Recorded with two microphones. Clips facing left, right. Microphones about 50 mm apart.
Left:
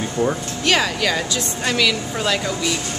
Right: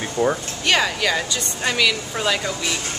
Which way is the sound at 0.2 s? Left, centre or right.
Centre.